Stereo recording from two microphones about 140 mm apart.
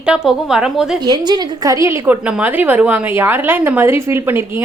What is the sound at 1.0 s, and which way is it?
A woman's voice, 30° right (ahead or behind).